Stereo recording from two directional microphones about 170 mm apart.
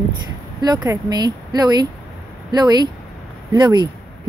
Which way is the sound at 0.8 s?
20° right (ahead or behind).